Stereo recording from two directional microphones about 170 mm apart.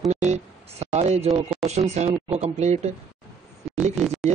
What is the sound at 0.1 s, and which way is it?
Speech, 45° right (ahead or behind).